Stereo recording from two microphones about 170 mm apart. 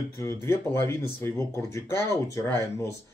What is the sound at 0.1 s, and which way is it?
Speech, 15° left (ahead or behind).